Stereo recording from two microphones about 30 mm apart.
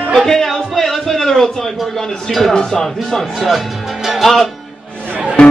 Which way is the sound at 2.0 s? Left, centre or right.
Centre.